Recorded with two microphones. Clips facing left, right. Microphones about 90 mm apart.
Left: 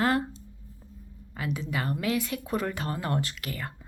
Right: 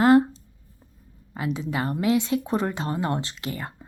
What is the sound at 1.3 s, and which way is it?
Speech, 25° right (ahead or behind).